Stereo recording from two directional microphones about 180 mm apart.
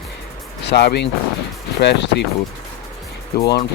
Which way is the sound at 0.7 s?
70° left (ahead or behind).